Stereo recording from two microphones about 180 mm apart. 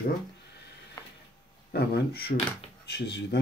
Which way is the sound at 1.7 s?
65° left (ahead or behind).